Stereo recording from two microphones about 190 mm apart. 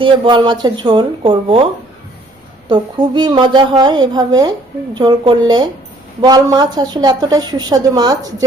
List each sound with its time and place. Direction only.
0.0 s a woman's voice: 25° right (ahead or behind)
2.6 s a woman's voice: 25° right (ahead or behind)